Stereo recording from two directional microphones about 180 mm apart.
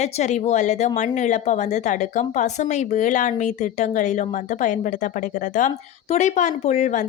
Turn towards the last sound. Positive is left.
turn(degrees=40)  # may be behind; listen again after turning